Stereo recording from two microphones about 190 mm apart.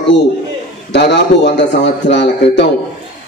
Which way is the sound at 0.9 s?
65° left (ahead or behind).